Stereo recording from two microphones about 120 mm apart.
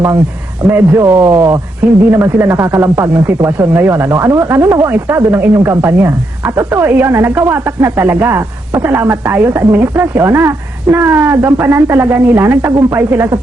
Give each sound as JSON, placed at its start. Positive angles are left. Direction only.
{"t": 0.7, "sound": "speech", "side_deg": -20}